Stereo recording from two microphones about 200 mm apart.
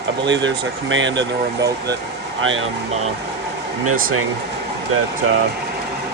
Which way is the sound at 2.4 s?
75° right (ahead or behind).